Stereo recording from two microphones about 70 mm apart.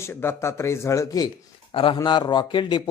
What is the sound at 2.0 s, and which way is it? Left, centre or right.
Speech, left.